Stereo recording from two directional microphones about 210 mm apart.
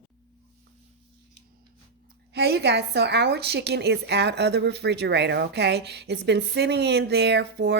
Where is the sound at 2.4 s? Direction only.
50° right (ahead or behind).